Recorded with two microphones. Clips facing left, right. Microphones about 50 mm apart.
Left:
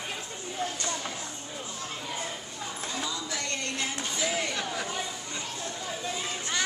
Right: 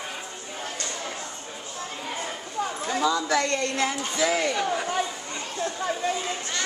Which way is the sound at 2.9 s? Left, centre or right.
Right.